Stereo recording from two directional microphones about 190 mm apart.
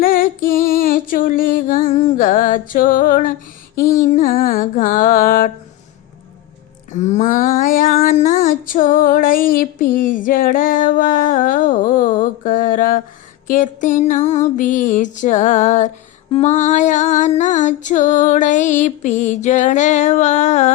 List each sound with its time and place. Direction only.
0.0 s music: 50° left (ahead or behind)
6.9 s a sound: 40° left (ahead or behind)
13.5 s female singing: 45° left (ahead or behind)